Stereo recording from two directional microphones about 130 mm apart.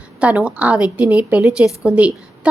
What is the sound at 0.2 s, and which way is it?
A woman's voice, 10° right (ahead or behind).